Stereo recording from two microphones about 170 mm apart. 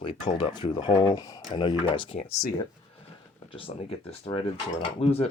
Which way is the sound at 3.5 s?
30° left (ahead or behind).